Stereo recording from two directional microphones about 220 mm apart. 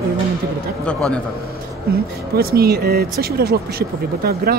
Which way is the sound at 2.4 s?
45° right (ahead or behind).